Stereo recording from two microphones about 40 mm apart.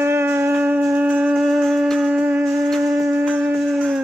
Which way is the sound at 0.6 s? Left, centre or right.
Right.